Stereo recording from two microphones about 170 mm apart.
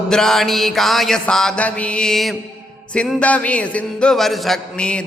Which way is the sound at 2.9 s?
5° left (ahead or behind).